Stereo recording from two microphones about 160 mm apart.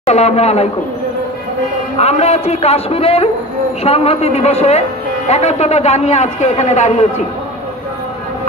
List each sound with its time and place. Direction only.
0.0 s a man's voice: 45° left (ahead or behind)
2.0 s a man's voice: 40° left (ahead or behind)